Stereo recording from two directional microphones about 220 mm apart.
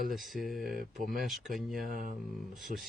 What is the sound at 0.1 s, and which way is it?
Speech, centre (ahead or behind).